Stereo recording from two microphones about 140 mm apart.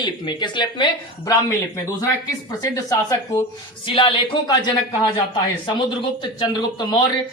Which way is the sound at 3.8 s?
35° left (ahead or behind).